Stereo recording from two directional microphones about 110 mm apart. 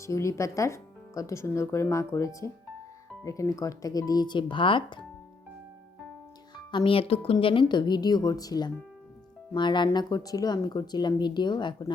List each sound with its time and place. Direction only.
0.0 s speech: 30° left (ahead or behind); by 5.0 s 50° left (ahead or behind)
6.7 s speech: 50° left (ahead or behind)